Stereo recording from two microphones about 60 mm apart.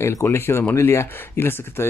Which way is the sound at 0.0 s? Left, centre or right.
Left.